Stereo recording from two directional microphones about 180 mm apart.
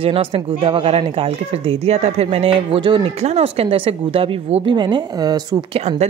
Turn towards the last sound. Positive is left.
turn(degrees=-35)  # may be behind; listen again after turning